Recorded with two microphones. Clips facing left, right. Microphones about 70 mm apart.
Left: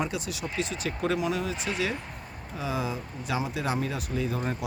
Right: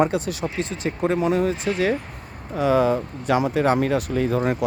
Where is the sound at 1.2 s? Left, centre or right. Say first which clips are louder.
Right 8 dB; right.